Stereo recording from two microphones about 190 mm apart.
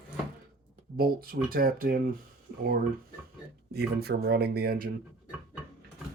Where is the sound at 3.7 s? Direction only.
55° right (ahead or behind).